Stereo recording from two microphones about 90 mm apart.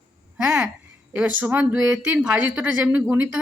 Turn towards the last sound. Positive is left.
turn(degrees=-20)  # may be behind; listen again after turning